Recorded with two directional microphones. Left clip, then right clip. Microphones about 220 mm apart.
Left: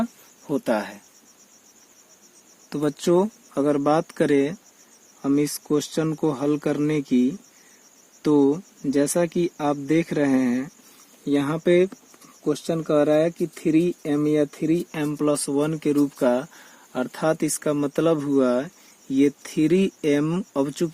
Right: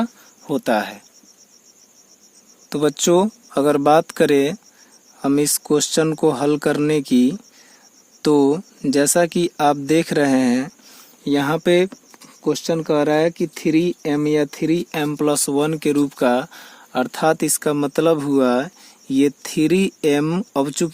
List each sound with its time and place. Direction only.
0.0 s speech: 20° right (ahead or behind)
2.6 s speech: 25° right (ahead or behind)